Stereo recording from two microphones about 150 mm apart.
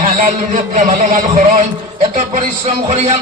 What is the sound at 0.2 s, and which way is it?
A man's voice, 60° right (ahead or behind).